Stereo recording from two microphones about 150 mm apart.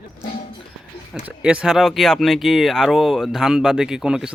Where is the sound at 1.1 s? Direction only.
10° right (ahead or behind).